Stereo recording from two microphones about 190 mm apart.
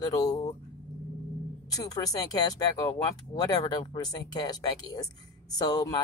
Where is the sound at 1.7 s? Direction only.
20° left (ahead or behind).